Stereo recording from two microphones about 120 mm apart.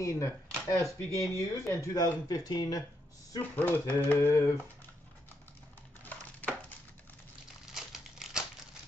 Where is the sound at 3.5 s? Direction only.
15° left (ahead or behind).